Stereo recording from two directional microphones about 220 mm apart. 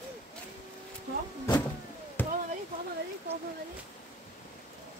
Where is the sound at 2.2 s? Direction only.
10° left (ahead or behind).